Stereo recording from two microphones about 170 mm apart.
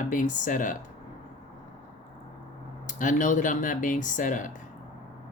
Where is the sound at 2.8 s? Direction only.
50° left (ahead or behind).